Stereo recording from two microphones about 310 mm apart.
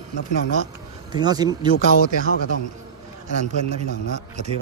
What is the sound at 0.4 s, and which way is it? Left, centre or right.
Speech, left.